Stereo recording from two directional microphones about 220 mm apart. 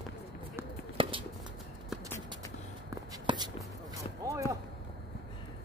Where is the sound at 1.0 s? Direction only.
25° right (ahead or behind).